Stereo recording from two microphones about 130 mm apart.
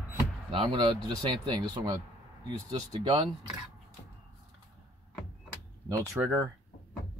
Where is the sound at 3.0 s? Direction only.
40° right (ahead or behind).